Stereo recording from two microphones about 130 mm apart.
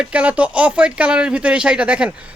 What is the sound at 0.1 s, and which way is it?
Speech, 10° right (ahead or behind).